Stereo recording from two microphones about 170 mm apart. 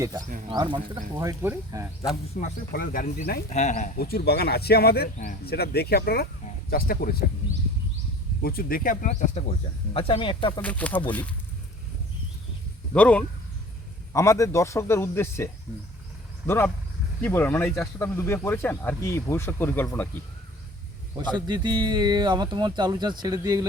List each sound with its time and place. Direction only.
0.0 s speech: 25° right (ahead or behind)
1.1 s speech: 15° right (ahead or behind)
2.4 s speech: 55° left (ahead or behind)
3.5 s speech: 45° left (ahead or behind); by 7.3 s 60° left (ahead or behind)
8.4 s speech: 60° left (ahead or behind); by 10.6 s 30° left (ahead or behind)
10.6 s speech: 10° left (ahead or behind)
12.9 s speech: 5° left (ahead or behind)
14.1 s speech: 15° left (ahead or behind)
16.5 s speech: 15° left (ahead or behind)
21.3 s speech: 25° right (ahead or behind)